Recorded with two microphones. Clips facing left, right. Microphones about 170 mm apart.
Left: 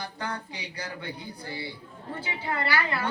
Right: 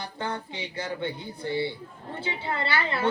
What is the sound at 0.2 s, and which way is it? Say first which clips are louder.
A woman's voice: right 6 dB; 25° right (ahead or behind).